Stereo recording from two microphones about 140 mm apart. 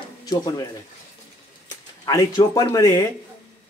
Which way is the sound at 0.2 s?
25° left (ahead or behind).